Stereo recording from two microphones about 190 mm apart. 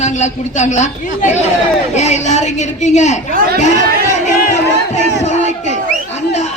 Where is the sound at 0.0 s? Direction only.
40° left (ahead or behind).